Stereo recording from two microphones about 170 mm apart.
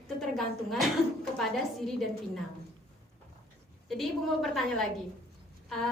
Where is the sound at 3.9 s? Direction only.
Centre (ahead or behind).